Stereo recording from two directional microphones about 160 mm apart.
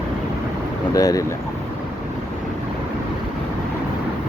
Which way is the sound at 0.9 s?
20° left (ahead or behind).